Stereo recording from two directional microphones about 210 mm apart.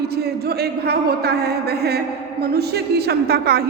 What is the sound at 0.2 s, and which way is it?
A woman's voice, 50° right (ahead or behind).